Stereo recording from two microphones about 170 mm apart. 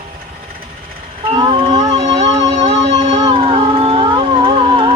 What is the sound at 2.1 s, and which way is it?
Music, 25° right (ahead or behind).